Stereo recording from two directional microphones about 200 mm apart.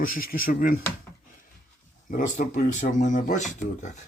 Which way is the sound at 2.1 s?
35° left (ahead or behind).